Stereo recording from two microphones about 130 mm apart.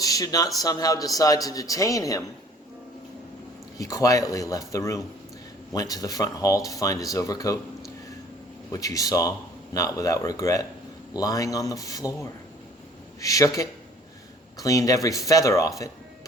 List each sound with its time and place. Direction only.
0.0 s speech: 30° left (ahead or behind)
3.8 s speech: 25° left (ahead or behind)
8.7 s speech: 25° left (ahead or behind)